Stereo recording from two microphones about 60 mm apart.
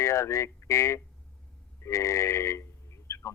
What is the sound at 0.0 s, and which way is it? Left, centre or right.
Speech, left.